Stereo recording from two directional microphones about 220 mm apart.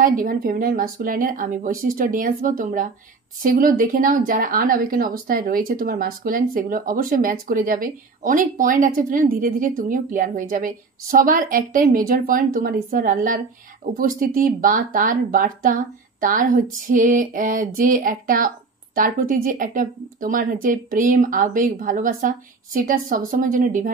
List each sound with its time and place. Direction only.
0.0 s a woman's voice: 40° right (ahead or behind)